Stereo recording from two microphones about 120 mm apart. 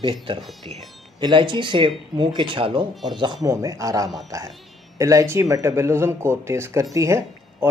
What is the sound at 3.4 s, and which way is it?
Speech, 30° right (ahead or behind).